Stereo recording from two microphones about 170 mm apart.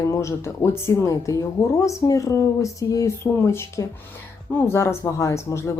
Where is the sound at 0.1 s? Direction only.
15° left (ahead or behind).